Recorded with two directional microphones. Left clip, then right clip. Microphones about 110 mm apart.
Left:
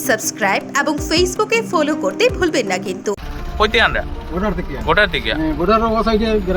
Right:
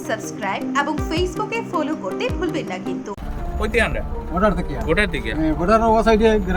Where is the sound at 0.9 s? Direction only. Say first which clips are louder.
Left 6 dB; 35° left (ahead or behind).